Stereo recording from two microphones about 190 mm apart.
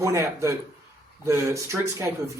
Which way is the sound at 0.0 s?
15° right (ahead or behind).